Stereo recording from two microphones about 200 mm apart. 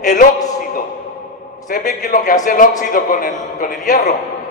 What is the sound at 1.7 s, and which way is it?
A man's voice, 40° left (ahead or behind).